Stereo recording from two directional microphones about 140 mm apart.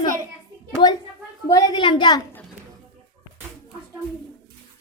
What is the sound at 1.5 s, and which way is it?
Speech, 30° left (ahead or behind).